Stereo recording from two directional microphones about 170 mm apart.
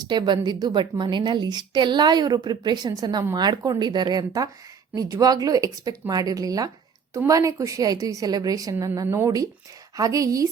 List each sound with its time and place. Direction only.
0.1 s a woman's voice: 25° right (ahead or behind)